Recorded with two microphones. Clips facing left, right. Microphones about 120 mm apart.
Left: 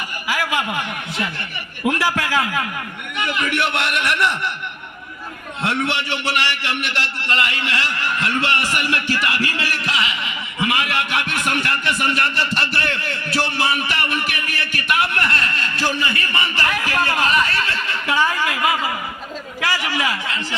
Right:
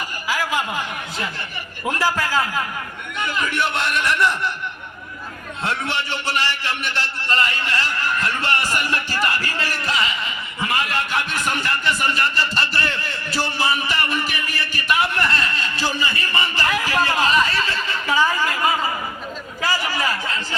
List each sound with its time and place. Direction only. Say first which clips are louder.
0.8 s a man's voice: left 2 dB; 65° left (ahead or behind)
2.4 s a man's voice: left 1 dB; 5° left (ahead or behind)
3.2 s a man's voice: left 1 dB; 75° left (ahead or behind)
5.8 s a man's voice: left 2 dB; 70° left (ahead or behind)